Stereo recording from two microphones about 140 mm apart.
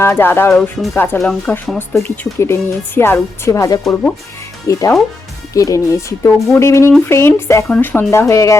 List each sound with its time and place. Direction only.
0.0 s speech: 15° left (ahead or behind)
0.5 s speech: centre (ahead or behind)
0.9 s speech: 15° left (ahead or behind)
2.0 s speech: 15° left (ahead or behind)